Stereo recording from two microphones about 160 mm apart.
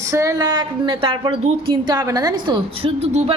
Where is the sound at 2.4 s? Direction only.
30° right (ahead or behind).